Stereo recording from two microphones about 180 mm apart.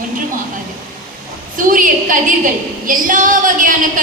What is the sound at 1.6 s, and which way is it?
A woman's voice, 50° right (ahead or behind).